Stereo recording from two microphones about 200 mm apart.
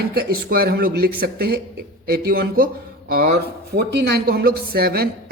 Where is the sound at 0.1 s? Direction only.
50° right (ahead or behind).